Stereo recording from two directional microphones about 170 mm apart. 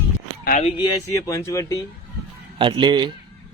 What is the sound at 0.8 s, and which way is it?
Speech, 20° left (ahead or behind).